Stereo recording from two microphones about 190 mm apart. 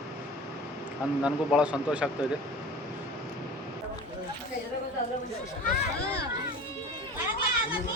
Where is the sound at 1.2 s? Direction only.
5° right (ahead or behind).